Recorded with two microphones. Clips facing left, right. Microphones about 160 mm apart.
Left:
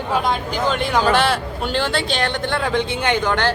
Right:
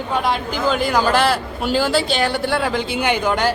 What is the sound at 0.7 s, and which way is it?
A man's voice, centre (ahead or behind).